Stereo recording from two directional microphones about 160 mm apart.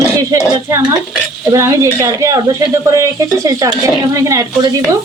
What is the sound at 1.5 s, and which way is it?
A woman's voice, 15° right (ahead or behind).